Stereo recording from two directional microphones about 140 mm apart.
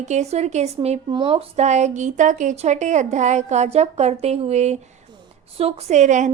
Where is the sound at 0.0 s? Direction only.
55° right (ahead or behind).